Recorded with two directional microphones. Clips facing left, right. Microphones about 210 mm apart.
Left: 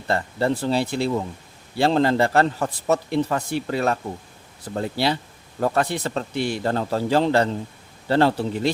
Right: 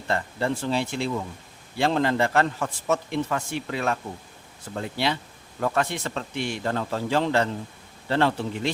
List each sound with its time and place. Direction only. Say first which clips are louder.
0.1 s a man's voice: left 4 dB; 35° left (ahead or behind)